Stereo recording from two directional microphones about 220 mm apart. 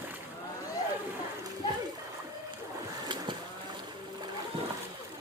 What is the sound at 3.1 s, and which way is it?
Boat, 20° right (ahead or behind).